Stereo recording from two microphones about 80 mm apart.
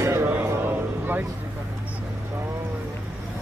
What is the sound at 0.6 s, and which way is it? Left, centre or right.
Vehicle, right.